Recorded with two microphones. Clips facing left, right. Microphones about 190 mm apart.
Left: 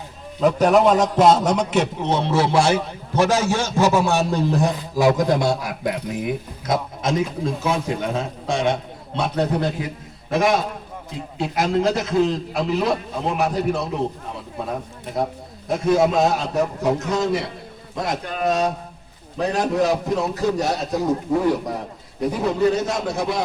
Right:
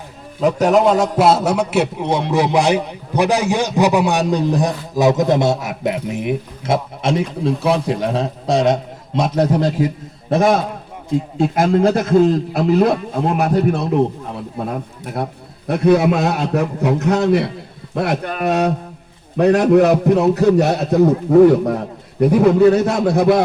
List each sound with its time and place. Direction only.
0.3 s a man's voice: 10° right (ahead or behind); by 9.7 s 40° right (ahead or behind)
11.3 s a man's voice: 50° right (ahead or behind)
15.6 s a man's voice: 65° right (ahead or behind)